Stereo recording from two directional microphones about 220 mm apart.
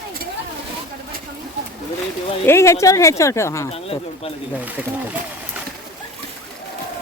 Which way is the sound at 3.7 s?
25° left (ahead or behind).